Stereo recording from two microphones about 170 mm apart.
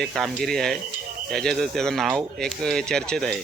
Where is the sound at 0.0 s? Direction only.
Centre (ahead or behind).